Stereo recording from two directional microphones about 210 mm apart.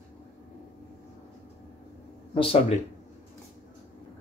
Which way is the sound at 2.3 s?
25° left (ahead or behind).